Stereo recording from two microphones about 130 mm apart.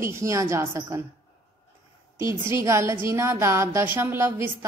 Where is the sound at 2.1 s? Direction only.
20° right (ahead or behind).